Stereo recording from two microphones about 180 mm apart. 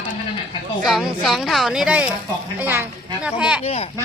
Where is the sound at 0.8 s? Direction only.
Centre (ahead or behind).